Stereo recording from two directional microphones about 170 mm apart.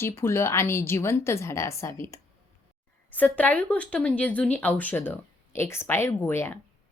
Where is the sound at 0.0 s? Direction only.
15° left (ahead or behind).